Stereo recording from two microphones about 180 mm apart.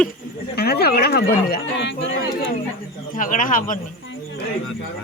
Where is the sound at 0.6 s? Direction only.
60° left (ahead or behind); by 2.5 s 80° left.